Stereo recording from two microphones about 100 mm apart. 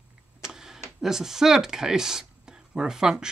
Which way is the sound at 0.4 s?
5° right (ahead or behind).